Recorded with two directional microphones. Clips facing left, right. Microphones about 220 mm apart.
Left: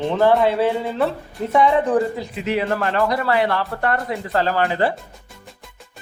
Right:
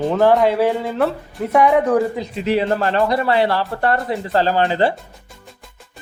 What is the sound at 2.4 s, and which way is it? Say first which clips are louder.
Speech: right 3 dB; 30° right (ahead or behind).